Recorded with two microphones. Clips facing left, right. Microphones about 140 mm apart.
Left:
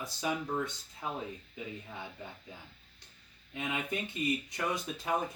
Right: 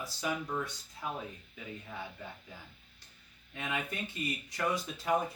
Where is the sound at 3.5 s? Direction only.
20° left (ahead or behind).